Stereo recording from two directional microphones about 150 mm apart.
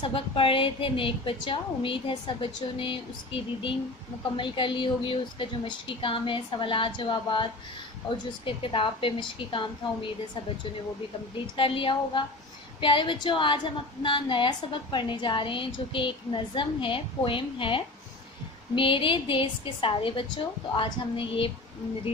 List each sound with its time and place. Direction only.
0.0 s a woman's voice: 35° left (ahead or behind)
11.3 s a woman's voice: 35° left (ahead or behind)